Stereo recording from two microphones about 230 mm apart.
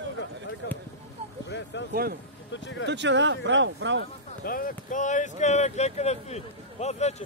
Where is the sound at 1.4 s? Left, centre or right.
Left.